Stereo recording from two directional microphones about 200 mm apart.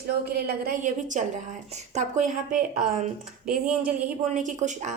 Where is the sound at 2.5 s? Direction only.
5° right (ahead or behind).